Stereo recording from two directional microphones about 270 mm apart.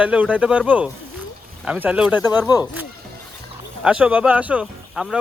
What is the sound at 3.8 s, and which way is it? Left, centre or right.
Speech, centre.